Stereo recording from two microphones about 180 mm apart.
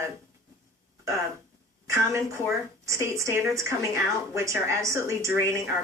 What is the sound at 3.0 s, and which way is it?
Speech, 15° right (ahead or behind).